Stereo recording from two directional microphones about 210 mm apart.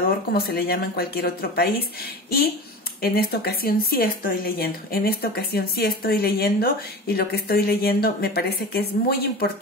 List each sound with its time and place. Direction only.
0.3 s a woman's voice: 45° left (ahead or behind)
3.0 s a woman's voice: 45° left (ahead or behind)